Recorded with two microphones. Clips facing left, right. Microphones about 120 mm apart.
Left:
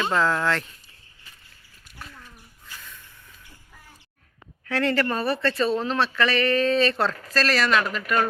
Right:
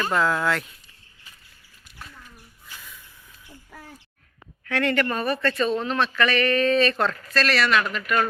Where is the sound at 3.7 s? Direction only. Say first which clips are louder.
Right 10 dB; 70° right (ahead or behind).